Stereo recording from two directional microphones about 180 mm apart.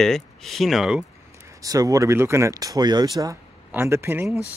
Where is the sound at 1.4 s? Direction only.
20° right (ahead or behind).